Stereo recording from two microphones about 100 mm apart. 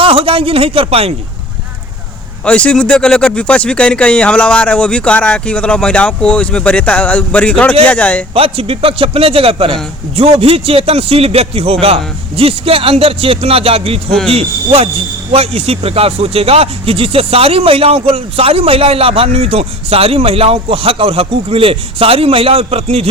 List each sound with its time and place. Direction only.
0.0 s a man's voice: 70° right (ahead or behind)
2.4 s speech: 10° left (ahead or behind)
8.3 s speech: 70° right (ahead or behind)
15.3 s speech: 90° right